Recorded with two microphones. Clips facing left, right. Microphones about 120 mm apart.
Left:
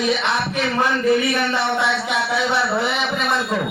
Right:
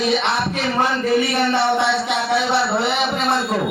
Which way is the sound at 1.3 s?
30° right (ahead or behind).